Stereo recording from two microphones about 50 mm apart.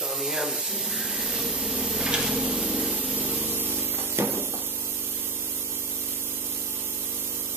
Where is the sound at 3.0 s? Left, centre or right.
Right.